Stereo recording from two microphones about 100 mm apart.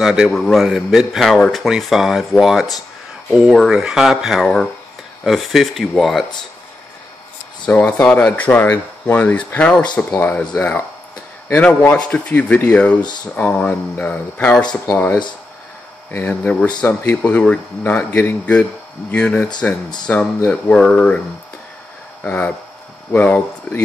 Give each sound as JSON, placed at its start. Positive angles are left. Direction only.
{"t": 0.0, "sound": "a man's voice", "side_deg": -5}
{"t": 7.6, "sound": "speech", "side_deg": 10}
{"t": 16.3, "sound": "speech", "side_deg": 15}
{"t": 22.2, "sound": "speech", "side_deg": 15}